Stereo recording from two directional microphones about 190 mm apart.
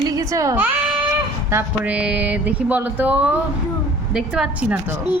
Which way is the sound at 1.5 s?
10° right (ahead or behind).